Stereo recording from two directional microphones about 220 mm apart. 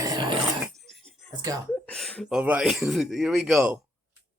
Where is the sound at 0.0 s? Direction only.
20° right (ahead or behind).